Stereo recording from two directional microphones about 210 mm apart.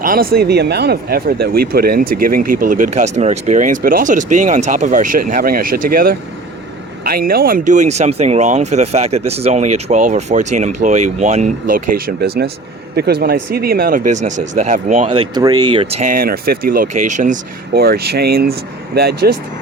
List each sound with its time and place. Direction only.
0.0 s speech: 45° right (ahead or behind)
15.4 s speech: 20° right (ahead or behind); by 17.3 s 35° right (ahead or behind)
17.7 s speech: 45° right (ahead or behind)